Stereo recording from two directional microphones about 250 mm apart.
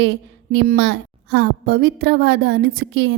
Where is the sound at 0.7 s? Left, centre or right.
Right.